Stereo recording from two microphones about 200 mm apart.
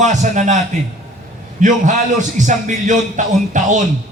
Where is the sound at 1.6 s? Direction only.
40° right (ahead or behind).